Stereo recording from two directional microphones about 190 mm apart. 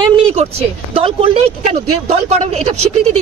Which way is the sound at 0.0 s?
35° right (ahead or behind).